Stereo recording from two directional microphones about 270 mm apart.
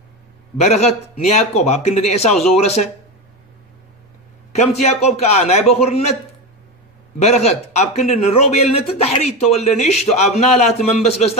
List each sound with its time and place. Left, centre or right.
0.6 s a man's voice: left
4.5 s a man's voice: left
7.2 s a man's voice: left